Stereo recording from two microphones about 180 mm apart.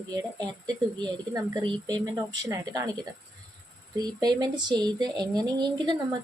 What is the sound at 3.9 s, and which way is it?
Speech, 25° right (ahead or behind).